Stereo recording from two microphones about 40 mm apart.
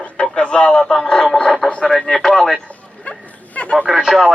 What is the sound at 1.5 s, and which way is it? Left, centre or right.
Radio, centre.